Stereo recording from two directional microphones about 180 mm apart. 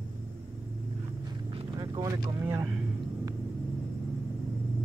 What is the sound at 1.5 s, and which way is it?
Vehicle, 25° right (ahead or behind).